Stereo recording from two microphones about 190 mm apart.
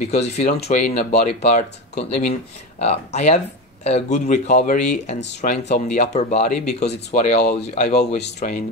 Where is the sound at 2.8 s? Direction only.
35° left (ahead or behind).